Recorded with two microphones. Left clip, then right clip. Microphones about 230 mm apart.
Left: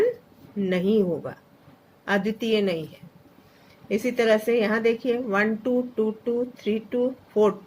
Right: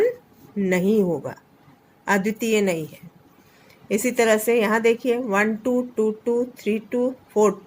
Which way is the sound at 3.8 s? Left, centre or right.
Right.